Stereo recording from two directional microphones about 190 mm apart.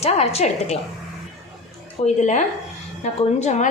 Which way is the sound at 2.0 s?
40° left (ahead or behind).